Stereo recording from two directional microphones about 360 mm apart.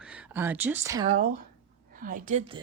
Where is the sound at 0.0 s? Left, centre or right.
Centre.